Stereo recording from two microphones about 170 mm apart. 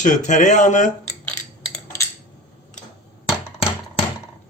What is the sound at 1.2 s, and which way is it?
Cutlery, 10° left (ahead or behind).